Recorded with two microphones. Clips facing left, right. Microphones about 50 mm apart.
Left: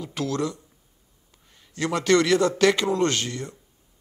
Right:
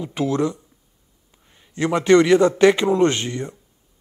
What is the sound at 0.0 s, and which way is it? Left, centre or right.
Speech, right.